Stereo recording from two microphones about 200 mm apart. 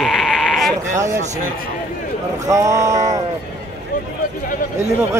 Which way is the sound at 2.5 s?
15° right (ahead or behind).